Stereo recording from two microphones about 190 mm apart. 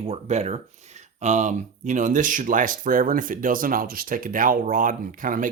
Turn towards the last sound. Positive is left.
turn(degrees=-45)  # may be behind; listen again after turning